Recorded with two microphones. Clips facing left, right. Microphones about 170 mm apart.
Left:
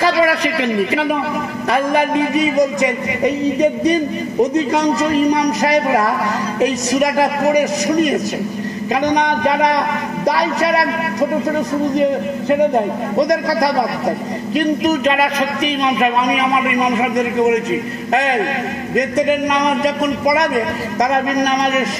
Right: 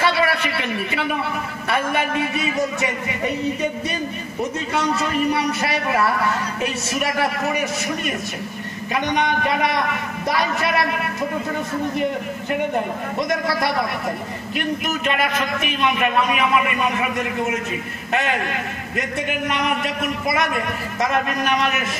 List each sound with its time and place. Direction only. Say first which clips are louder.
0.0 s a man's voice: left 5 dB; 35° left (ahead or behind)
18.9 s a man's voice: left 10 dB; 40° left (ahead or behind)